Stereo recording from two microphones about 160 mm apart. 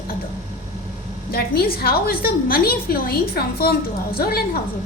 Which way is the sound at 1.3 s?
75° left (ahead or behind).